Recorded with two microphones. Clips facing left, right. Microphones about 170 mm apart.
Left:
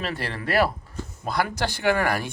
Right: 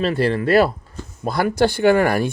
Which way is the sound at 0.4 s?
25° right (ahead or behind).